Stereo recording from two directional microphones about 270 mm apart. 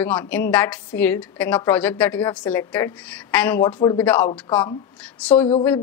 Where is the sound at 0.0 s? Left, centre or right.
Centre.